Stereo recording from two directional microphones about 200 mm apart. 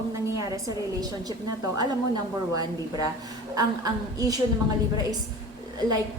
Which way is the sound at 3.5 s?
20° right (ahead or behind).